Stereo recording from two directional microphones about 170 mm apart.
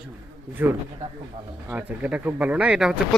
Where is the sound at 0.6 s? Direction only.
15° right (ahead or behind).